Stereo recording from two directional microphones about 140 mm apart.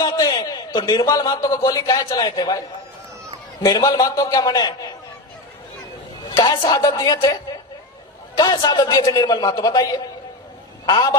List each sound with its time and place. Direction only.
0.0 s a man's voice: 30° left (ahead or behind)
6.3 s a man's voice: 30° left (ahead or behind)
8.4 s a man's voice: 30° left (ahead or behind)